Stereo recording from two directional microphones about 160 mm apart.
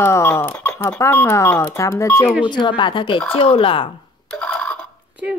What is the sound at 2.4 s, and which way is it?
A woman's voice, 30° left (ahead or behind).